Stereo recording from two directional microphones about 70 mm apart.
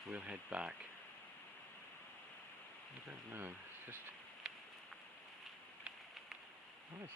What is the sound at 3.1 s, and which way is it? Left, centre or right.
Speech, right.